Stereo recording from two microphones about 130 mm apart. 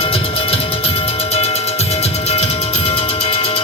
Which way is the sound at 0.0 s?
45° left (ahead or behind).